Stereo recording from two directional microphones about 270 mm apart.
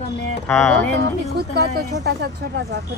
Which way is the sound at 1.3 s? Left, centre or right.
Right.